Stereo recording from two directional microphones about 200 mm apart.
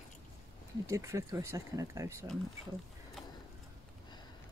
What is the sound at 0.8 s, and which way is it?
Speech, 15° right (ahead or behind).